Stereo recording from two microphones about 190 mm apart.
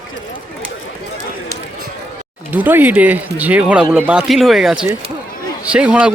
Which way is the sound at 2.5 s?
10° right (ahead or behind).